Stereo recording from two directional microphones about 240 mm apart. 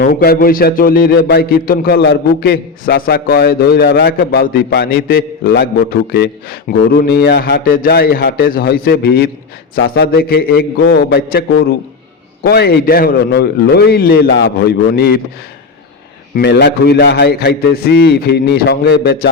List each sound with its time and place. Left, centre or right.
0.0 s a man's voice: left
16.3 s a man's voice: left